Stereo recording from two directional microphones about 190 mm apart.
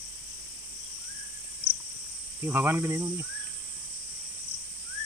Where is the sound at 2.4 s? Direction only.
10° right (ahead or behind).